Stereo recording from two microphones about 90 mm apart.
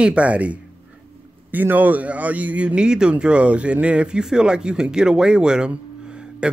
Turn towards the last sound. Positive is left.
turn(degrees=-10)  # may be behind; listen again after turning